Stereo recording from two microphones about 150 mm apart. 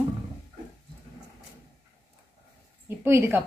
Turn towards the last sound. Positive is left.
turn(degrees=-15)  # may be behind; listen again after turning